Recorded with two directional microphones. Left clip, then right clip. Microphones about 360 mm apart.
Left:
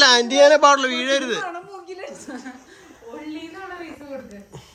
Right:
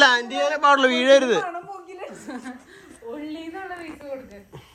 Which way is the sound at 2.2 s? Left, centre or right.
Centre.